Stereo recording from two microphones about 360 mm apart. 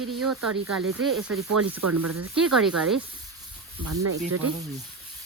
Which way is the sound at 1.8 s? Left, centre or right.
Right.